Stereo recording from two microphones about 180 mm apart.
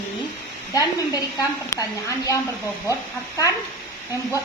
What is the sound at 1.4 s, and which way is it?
A woman's voice, 20° left (ahead or behind).